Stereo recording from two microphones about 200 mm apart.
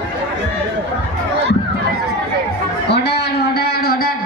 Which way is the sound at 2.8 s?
55° left (ahead or behind).